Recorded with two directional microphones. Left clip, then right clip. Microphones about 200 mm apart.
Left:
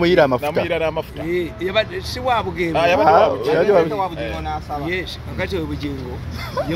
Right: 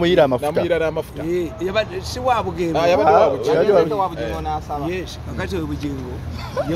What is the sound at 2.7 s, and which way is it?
Speech, 35° right (ahead or behind).